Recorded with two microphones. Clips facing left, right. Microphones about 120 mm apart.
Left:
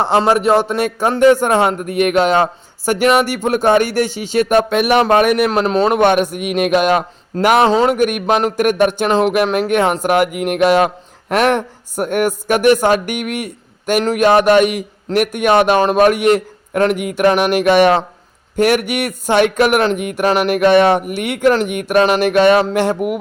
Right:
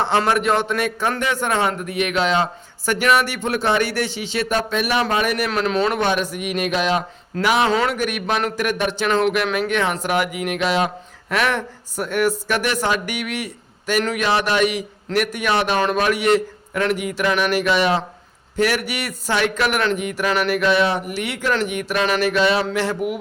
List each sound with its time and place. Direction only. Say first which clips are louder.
0.2 s speech: left 6 dB; 35° left (ahead or behind); by 5.5 s 55° left (ahead or behind)
5.5 s speech: left 6 dB; 40° left (ahead or behind)
6.0 s a man's voice: left 8 dB; 55° left (ahead or behind)
7.6 s speech: left 6 dB; 35° left (ahead or behind)
7.9 s a man's voice: left 7 dB; 50° left (ahead or behind)
20.2 s speech: left 6 dB; 45° left (ahead or behind)